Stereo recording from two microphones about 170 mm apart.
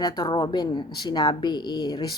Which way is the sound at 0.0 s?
25° left (ahead or behind).